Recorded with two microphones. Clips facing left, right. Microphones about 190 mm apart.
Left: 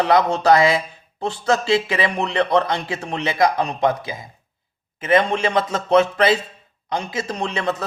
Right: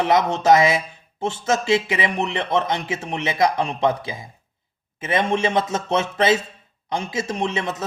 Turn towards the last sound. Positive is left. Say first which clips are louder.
# left 1 dB
turn(degrees=-20)  # may be behind; listen again after turning